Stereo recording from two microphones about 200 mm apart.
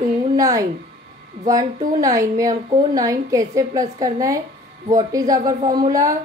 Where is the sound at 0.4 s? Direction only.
15° right (ahead or behind).